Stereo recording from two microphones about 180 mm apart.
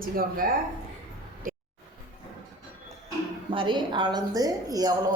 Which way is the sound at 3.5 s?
30° right (ahead or behind).